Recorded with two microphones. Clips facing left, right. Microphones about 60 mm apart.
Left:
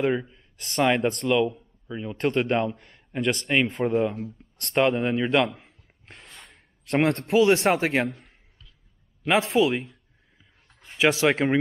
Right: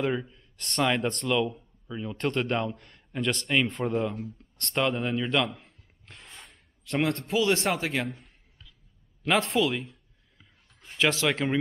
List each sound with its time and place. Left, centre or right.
0.0 s a man's voice: centre
4.7 s speech: left
6.2 s a sound: centre
6.9 s speech: left
9.2 s a man's voice: centre
11.0 s speech: centre